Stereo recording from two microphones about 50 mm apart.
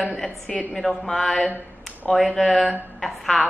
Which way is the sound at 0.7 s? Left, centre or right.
Centre.